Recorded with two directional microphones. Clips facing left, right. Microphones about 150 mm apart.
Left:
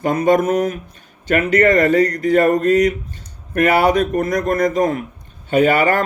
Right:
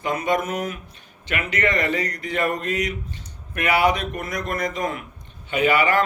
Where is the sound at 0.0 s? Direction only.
45° left (ahead or behind).